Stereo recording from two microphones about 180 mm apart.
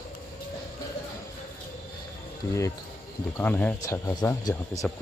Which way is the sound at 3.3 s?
10° left (ahead or behind).